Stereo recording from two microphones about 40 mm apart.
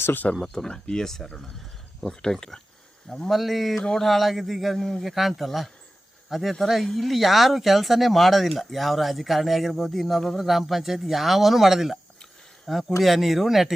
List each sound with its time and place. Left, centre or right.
0.4 s speech: centre
3.2 s speech: centre